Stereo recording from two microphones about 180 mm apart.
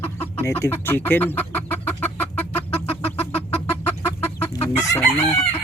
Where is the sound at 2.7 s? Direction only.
35° left (ahead or behind).